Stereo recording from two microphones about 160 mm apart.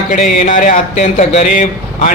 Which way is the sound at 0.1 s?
50° left (ahead or behind).